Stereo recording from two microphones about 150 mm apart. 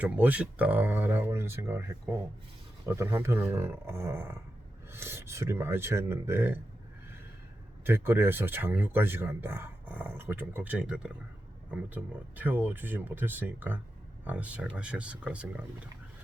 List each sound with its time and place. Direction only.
0.0 s speech: 10° right (ahead or behind)
7.9 s speech: 15° right (ahead or behind)